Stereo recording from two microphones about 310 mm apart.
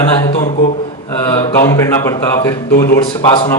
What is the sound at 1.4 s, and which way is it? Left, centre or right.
A man's voice, centre.